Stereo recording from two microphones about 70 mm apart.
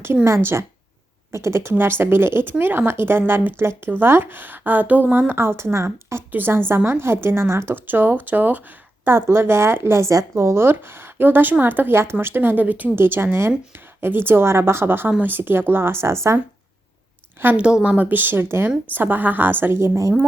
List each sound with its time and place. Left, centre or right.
0.3 s a woman's voice: right
5.3 s a woman's voice: right
6.3 s a woman's voice: right
9.1 s a woman's voice: right
17.6 s a woman's voice: centre; by 20.1 s right